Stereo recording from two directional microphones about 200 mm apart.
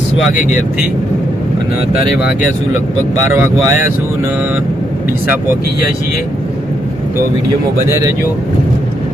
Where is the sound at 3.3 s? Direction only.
10° right (ahead or behind).